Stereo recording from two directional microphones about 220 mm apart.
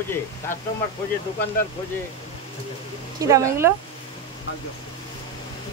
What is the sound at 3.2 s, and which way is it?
Speech, 15° right (ahead or behind).